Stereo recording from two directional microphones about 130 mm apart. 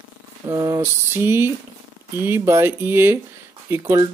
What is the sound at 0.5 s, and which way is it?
Speech, 25° right (ahead or behind).